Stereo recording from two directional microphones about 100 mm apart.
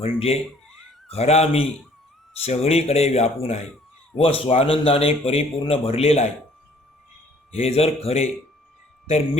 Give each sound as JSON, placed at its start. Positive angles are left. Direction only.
{"t": 0.0, "sound": "a man's voice", "side_deg": 85}
{"t": 4.2, "sound": "a man's voice", "side_deg": 70}
{"t": 7.5, "sound": "speech", "side_deg": 90}